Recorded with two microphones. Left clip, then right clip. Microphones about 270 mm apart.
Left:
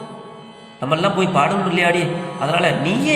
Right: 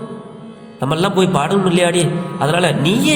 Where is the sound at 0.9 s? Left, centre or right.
Right.